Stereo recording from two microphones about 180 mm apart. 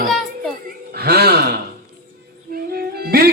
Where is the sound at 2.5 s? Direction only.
60° right (ahead or behind).